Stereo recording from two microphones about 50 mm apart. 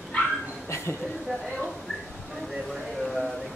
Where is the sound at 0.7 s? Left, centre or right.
Left.